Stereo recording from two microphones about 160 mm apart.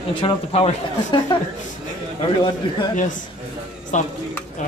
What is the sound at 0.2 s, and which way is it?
Speech, 40° left (ahead or behind).